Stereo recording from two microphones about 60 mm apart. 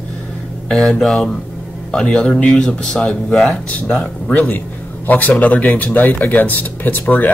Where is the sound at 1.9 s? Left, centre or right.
Centre.